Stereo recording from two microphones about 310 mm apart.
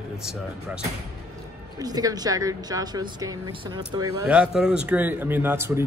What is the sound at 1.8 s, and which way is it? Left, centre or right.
Speech, centre.